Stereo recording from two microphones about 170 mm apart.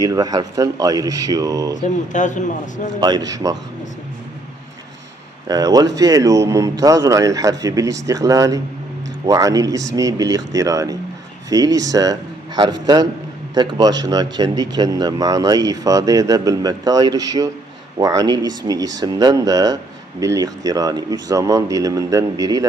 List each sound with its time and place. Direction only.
0.0 s speech: 20° right (ahead or behind)
2.1 s a man's voice: 45° left (ahead or behind)
3.0 s speech: 25° right (ahead or behind)
5.5 s speech: 20° right (ahead or behind)
13.5 s speech: 25° right (ahead or behind)